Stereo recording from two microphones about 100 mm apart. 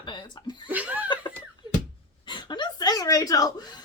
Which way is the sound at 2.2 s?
50° left (ahead or behind).